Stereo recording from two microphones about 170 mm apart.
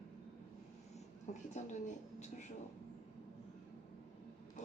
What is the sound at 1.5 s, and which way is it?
Speech, 45° left (ahead or behind).